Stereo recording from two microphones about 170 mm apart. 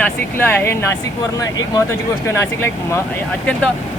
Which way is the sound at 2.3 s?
15° left (ahead or behind).